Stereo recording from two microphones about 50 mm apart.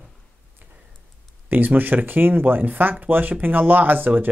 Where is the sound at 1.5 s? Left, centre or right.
Right.